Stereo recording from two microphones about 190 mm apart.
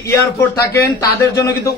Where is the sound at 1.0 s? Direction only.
15° left (ahead or behind).